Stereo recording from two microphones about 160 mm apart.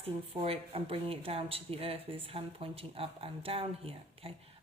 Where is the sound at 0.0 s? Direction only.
35° right (ahead or behind).